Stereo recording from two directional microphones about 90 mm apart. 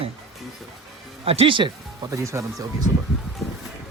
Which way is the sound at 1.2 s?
75° right (ahead or behind).